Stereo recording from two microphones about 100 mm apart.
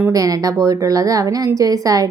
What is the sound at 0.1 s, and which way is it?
Speech, 35° right (ahead or behind).